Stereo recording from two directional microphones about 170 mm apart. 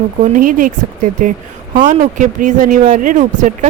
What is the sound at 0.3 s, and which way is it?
Speech, 50° right (ahead or behind).